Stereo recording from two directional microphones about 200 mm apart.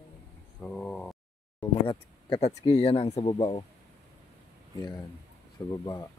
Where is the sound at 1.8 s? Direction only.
30° left (ahead or behind).